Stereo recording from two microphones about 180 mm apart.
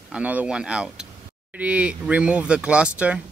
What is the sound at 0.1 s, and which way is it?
Speech, 10° right (ahead or behind).